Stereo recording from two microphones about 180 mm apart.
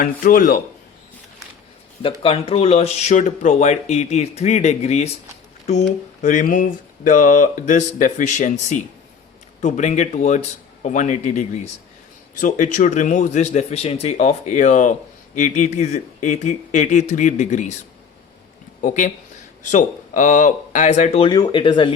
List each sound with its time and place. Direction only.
0.0 s speech: 50° left (ahead or behind)
2.2 s speech: 30° left (ahead or behind)
6.2 s speech: 45° left (ahead or behind)
18.8 s speech: 45° left (ahead or behind)
21.2 s speech: 25° left (ahead or behind)